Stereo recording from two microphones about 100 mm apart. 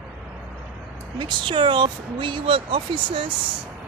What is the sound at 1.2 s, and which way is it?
Speech, 55° right (ahead or behind).